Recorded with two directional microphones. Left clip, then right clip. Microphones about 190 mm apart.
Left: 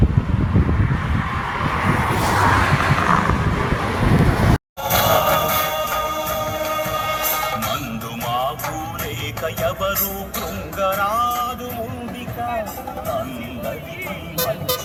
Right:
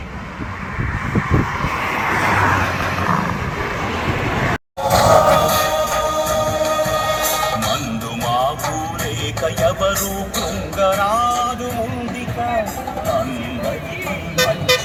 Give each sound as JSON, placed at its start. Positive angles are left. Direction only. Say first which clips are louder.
{"t": 1.1, "sound": "vehicle", "louder": "right 4 dB", "side_deg": -5}
{"t": 2.3, "sound": "vehicle", "louder": "even", "side_deg": -40}
{"t": 3.1, "sound": "vehicle", "louder": "left 2 dB", "side_deg": -10}
{"t": 4.9, "sound": "a sound", "louder": "right 5 dB", "side_deg": -10}
{"t": 5.4, "sound": "music", "louder": "right 4 dB", "side_deg": -35}
{"t": 7.0, "sound": "music", "louder": "right 3 dB", "side_deg": 0}
{"t": 9.4, "sound": "music", "louder": "right 5 dB", "side_deg": -25}
{"t": 11.2, "sound": "music", "louder": "right 3 dB", "side_deg": 5}
{"t": 14.7, "sound": "vehicle", "louder": "right 8 dB", "side_deg": 65}